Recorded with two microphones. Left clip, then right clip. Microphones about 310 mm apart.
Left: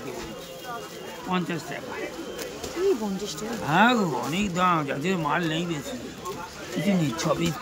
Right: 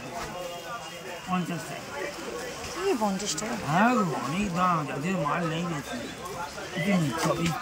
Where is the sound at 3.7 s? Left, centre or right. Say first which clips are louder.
Left 4 dB; centre.